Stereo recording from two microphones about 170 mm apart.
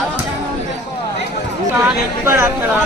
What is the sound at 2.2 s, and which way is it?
Speech, 15° right (ahead or behind).